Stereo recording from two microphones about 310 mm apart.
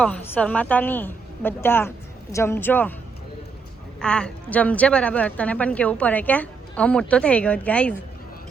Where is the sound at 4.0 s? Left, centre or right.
Centre.